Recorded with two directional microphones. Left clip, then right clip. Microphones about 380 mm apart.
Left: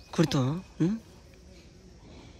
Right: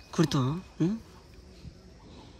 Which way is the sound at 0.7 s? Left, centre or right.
Centre.